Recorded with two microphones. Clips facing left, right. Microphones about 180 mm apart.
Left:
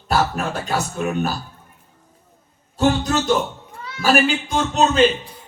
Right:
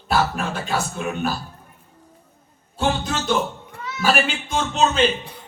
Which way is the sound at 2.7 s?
40° left (ahead or behind).